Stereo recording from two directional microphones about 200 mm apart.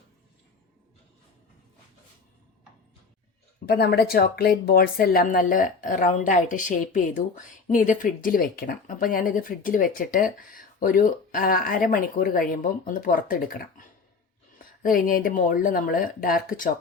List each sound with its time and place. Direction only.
3.7 s speech: 55° left (ahead or behind)